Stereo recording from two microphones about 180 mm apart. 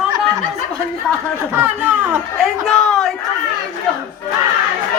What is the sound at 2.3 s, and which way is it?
Speech, centre (ahead or behind).